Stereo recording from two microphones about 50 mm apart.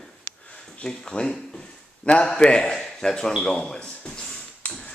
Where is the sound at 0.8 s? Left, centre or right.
Centre.